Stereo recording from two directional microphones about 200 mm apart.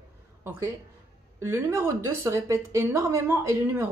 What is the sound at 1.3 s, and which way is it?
Speech, 10° right (ahead or behind).